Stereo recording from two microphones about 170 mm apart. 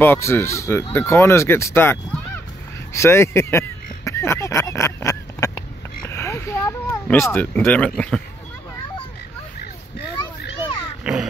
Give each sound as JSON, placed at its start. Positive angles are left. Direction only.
{"t": 0.0, "sound": "speech", "side_deg": 15}
{"t": 2.9, "sound": "a sound", "side_deg": 15}
{"t": 6.0, "sound": "speech", "side_deg": 15}
{"t": 11.1, "sound": "music", "side_deg": -5}